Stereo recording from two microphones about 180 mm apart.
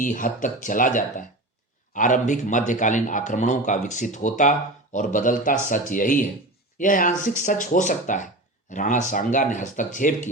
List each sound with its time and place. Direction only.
0.0 s a man's voice: 45° left (ahead or behind)